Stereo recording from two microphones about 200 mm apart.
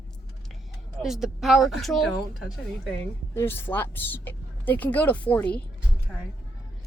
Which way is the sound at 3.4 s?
10° left (ahead or behind).